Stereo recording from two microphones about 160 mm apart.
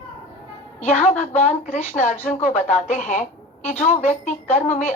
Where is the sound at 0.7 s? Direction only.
45° left (ahead or behind).